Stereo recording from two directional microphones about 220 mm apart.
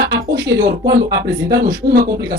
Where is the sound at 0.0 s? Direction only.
50° right (ahead or behind).